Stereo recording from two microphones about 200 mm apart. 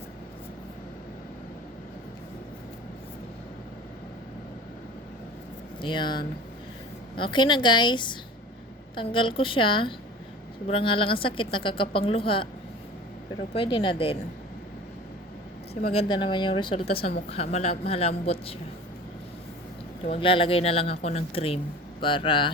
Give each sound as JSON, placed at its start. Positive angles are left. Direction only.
{"t": 5.8, "sound": "a woman's voice", "side_deg": 25}
{"t": 13.5, "sound": "a woman's voice", "side_deg": 25}
{"t": 15.9, "sound": "a woman's voice", "side_deg": 25}
{"t": 20.1, "sound": "a woman's voice", "side_deg": 25}